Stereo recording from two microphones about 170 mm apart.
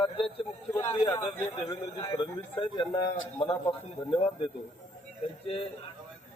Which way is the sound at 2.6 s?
30° left (ahead or behind).